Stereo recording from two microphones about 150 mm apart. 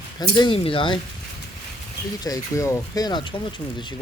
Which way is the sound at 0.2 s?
30° left (ahead or behind).